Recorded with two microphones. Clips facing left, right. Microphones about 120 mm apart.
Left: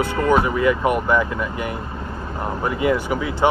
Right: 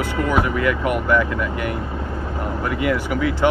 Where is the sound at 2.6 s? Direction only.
25° left (ahead or behind).